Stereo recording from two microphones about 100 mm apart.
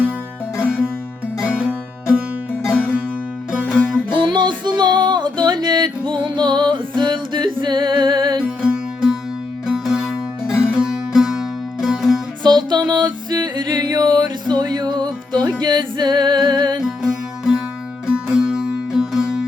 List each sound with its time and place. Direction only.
0.6 s music: 5° right (ahead or behind)
4.1 s music: 50° right (ahead or behind)
8.4 s music: 10° right (ahead or behind)
12.4 s music: 45° right (ahead or behind)
16.8 s music: 5° right (ahead or behind)